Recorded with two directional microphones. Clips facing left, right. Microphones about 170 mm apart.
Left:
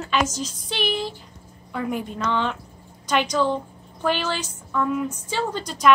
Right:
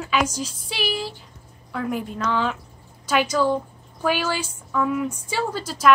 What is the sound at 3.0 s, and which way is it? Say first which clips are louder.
A woman's voice: right 1 dB; 5° right (ahead or behind).